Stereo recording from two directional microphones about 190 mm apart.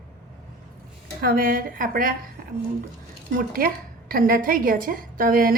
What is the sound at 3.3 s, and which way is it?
A woman's voice, 50° right (ahead or behind).